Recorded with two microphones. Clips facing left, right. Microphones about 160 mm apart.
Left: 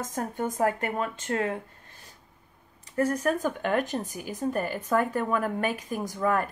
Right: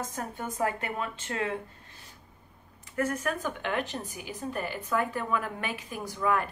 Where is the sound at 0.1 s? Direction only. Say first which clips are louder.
Left 6 dB; 45° left (ahead or behind).